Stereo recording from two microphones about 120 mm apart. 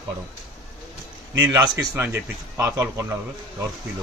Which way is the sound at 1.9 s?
20° right (ahead or behind).